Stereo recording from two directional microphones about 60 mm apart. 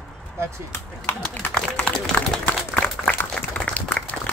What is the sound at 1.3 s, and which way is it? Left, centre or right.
Speech, left.